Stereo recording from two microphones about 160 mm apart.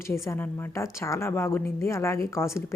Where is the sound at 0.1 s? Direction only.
15° left (ahead or behind).